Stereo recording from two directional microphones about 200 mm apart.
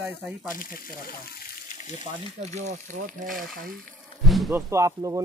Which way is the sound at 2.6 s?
35° right (ahead or behind).